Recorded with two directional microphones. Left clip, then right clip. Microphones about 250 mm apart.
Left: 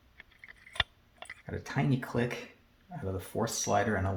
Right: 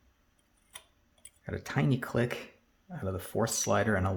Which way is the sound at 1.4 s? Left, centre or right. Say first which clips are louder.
Right 1 dB; right.